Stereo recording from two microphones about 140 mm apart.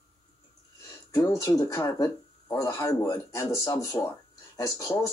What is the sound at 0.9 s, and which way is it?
Speech, 25° left (ahead or behind).